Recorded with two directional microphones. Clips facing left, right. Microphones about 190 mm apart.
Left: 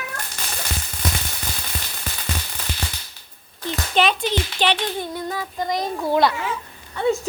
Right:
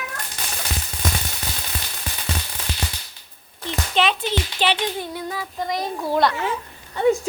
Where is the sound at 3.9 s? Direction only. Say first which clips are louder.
Left 1 dB; centre (ahead or behind).